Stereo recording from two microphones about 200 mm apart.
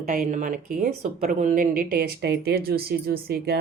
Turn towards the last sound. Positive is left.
turn(degrees=-50)  # may be behind; listen again after turning